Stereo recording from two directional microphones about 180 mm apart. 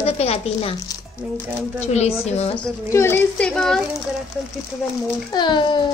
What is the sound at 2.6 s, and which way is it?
Speech, 15° left (ahead or behind).